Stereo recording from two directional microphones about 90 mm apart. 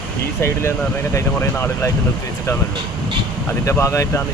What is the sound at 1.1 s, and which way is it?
Speech, 25° left (ahead or behind).